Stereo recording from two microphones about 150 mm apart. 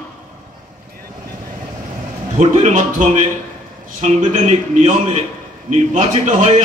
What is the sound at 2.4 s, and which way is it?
A man's voice, 55° right (ahead or behind).